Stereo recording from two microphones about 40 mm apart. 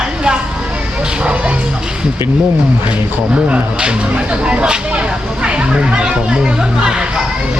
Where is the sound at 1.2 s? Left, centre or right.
Right.